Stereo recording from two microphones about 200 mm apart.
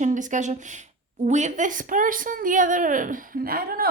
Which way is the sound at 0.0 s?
40° right (ahead or behind).